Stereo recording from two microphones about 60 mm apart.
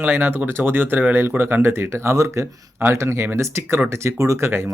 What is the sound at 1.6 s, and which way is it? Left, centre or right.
Speech, right.